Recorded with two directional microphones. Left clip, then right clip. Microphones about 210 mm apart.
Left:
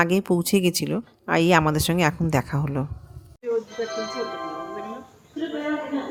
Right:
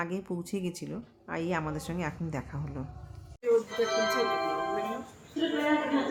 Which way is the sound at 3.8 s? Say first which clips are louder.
Even; 25° left (ahead or behind).